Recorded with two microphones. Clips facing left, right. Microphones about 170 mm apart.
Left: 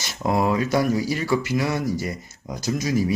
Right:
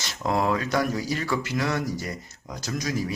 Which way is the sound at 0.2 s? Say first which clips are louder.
Left 3 dB; 10° left (ahead or behind).